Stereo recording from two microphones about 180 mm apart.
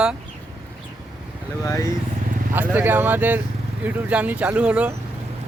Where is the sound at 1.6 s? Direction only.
20° left (ahead or behind).